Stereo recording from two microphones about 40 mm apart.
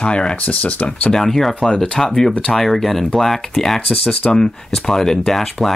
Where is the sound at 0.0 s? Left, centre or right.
Left.